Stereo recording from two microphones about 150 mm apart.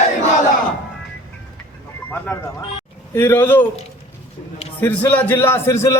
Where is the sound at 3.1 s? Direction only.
15° left (ahead or behind).